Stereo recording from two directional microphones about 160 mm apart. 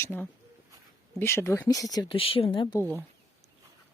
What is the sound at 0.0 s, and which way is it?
Speech, 10° left (ahead or behind).